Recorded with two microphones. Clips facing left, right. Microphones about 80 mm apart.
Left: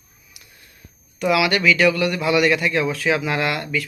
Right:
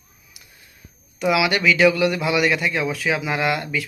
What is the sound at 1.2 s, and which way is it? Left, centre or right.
Speech, centre.